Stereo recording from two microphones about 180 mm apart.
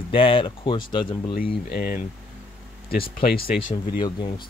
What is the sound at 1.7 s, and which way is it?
Speech, 55° left (ahead or behind).